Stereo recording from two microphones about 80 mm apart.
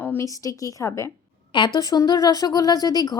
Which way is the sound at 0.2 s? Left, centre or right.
Left.